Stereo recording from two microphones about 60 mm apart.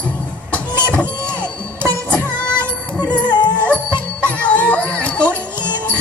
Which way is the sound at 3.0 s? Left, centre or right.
Left.